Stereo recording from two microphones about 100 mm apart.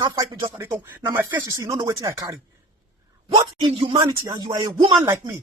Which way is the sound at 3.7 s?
90° right.